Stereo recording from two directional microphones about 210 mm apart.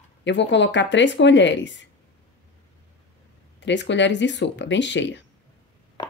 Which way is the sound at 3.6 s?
60° left (ahead or behind).